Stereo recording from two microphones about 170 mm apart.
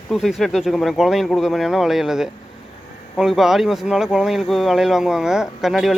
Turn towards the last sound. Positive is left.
turn(degrees=0)  # may be behind; listen again after turning